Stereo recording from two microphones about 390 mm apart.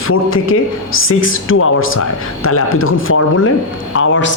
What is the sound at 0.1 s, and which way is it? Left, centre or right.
Speech, left.